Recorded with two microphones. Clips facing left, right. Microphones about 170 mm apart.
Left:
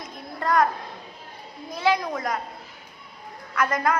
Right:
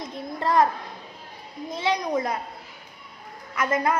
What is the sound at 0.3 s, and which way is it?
Speech, 30° right (ahead or behind).